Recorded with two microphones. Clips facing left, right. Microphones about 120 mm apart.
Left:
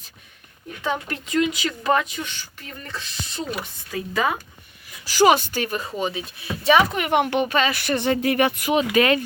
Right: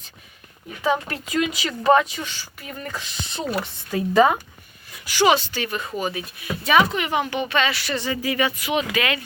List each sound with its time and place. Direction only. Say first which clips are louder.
0.9 s speech: right 3 dB; 5° right (ahead or behind)
3.0 s speech: right 2 dB; 20° right (ahead or behind)
5.0 s speech: left 2 dB; 40° left (ahead or behind)
6.9 s speech: left 3 dB; 55° left (ahead or behind)
7.4 s speech: left 1 dB; 40° left (ahead or behind); by 8.7 s 55° left (ahead or behind)
8.7 s speech: left 5 dB; 35° left (ahead or behind)